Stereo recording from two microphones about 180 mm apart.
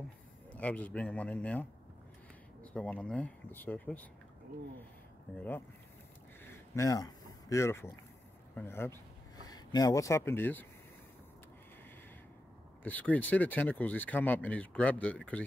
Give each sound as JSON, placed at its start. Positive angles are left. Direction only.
{"t": 0.5, "sound": "speech", "side_deg": 10}
{"t": 6.4, "sound": "a sound", "side_deg": 15}
{"t": 8.5, "sound": "speech", "side_deg": 15}
{"t": 12.8, "sound": "speech", "side_deg": 10}